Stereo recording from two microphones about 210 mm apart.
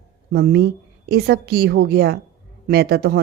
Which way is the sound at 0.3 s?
50° right (ahead or behind).